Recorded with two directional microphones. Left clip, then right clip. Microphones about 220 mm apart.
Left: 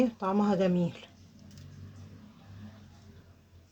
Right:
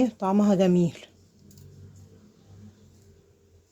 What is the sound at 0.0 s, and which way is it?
Speech, 45° right (ahead or behind).